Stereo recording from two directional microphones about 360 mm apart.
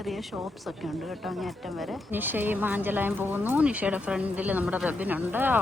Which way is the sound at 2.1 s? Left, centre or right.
Centre.